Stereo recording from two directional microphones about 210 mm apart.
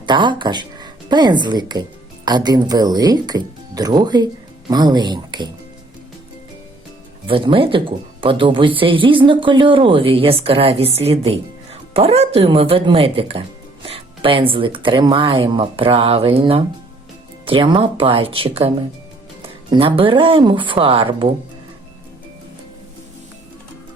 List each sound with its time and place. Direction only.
0.0 s speech: 20° right (ahead or behind)
7.3 s speech: 25° right (ahead or behind)